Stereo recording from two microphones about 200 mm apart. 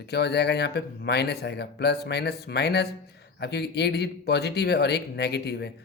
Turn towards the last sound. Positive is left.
turn(degrees=55)  # may be behind; listen again after turning